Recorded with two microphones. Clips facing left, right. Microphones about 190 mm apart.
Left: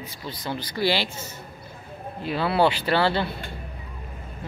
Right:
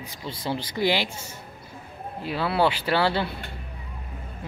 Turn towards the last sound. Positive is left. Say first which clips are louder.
# left 1 dB
turn(degrees=-10)  # may be behind; listen again after turning